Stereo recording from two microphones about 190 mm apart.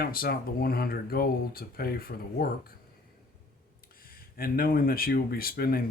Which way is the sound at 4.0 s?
50° left (ahead or behind).